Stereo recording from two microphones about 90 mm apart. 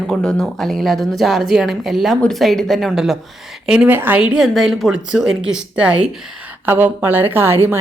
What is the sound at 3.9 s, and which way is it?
A woman's voice, 20° right (ahead or behind).